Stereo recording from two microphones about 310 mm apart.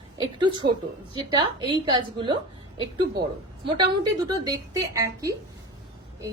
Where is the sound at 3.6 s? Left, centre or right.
Centre.